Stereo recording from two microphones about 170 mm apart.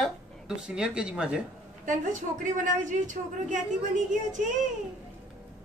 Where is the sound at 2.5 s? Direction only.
50° right (ahead or behind).